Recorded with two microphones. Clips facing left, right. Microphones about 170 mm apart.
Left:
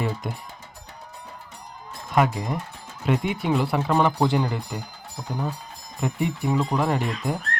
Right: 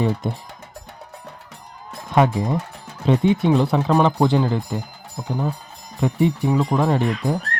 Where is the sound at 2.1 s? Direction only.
25° right (ahead or behind).